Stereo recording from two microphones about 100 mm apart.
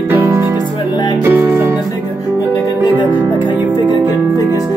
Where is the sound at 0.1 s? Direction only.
20° right (ahead or behind).